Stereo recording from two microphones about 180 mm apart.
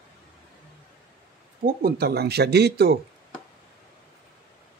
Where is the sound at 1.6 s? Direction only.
55° right (ahead or behind).